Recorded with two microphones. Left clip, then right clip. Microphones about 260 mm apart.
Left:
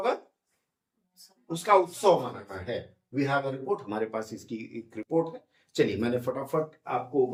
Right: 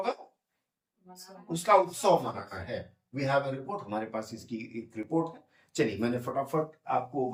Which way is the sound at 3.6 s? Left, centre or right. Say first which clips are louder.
Left 5 dB; centre.